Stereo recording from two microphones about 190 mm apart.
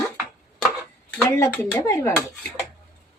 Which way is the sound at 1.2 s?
15° left (ahead or behind).